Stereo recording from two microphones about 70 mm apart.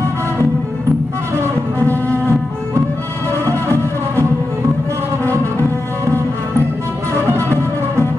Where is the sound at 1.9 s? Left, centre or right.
Left.